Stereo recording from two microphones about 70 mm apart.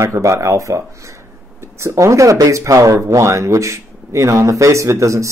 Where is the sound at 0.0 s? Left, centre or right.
Right.